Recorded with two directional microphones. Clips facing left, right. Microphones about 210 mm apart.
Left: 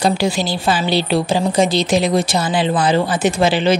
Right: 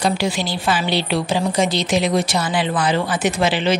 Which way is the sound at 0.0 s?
35° left (ahead or behind).